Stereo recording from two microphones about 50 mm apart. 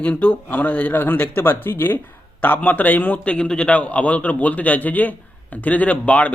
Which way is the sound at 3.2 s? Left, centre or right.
Left.